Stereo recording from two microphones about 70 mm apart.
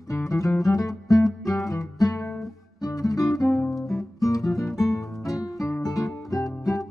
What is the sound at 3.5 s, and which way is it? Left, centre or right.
Music, left.